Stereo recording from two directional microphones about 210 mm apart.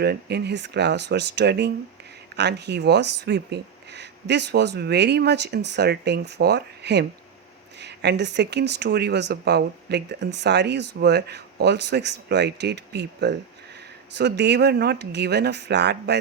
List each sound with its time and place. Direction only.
0.0 s speech: 50° right (ahead or behind)